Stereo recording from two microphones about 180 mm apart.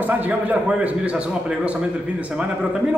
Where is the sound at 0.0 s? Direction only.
10° right (ahead or behind).